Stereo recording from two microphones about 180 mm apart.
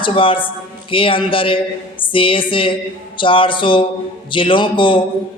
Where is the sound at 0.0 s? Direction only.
30° left (ahead or behind).